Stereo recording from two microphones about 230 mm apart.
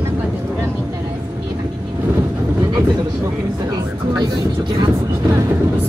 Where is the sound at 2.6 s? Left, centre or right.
Centre.